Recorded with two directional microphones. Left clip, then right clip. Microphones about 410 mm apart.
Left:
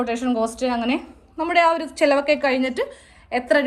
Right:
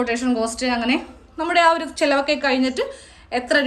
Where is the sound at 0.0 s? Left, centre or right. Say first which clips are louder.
Right 1 dB; centre.